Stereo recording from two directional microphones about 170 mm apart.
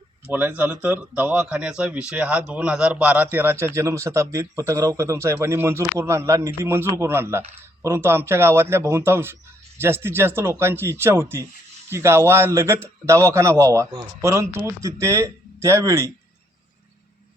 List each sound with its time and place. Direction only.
0.3 s a man's voice: 10° right (ahead or behind)